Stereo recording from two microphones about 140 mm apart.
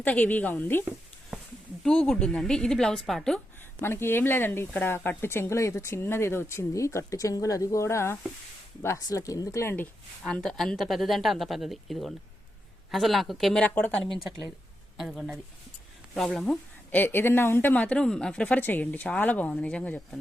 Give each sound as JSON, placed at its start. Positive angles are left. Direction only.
{"t": 0.0, "sound": "speech", "side_deg": 10}
{"t": 1.8, "sound": "speech", "side_deg": 5}
{"t": 3.8, "sound": "speech", "side_deg": 15}